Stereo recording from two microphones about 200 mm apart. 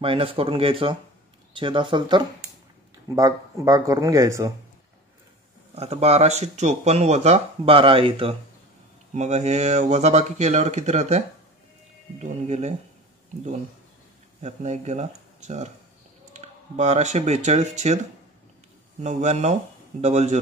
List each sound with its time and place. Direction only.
0.0 s speech: 25° right (ahead or behind)
5.8 s speech: 30° right (ahead or behind)
14.4 s speech: 35° right (ahead or behind)